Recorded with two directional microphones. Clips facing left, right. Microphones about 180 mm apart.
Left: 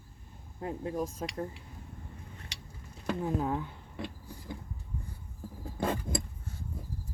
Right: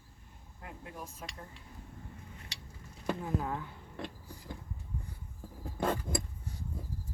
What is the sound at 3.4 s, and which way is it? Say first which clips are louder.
Speech: left 5 dB; 20° left (ahead or behind).